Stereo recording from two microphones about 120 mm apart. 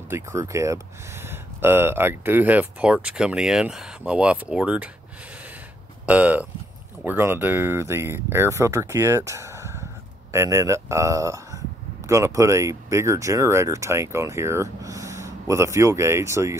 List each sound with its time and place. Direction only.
0.1 s speech: 25° right (ahead or behind)
6.0 s speech: 10° right (ahead or behind)